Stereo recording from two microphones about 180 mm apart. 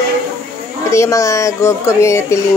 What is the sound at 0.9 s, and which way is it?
Speech, 15° left (ahead or behind).